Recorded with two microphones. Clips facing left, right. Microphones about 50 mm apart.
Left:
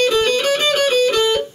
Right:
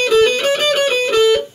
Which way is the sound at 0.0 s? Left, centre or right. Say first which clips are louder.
Right 3 dB; right.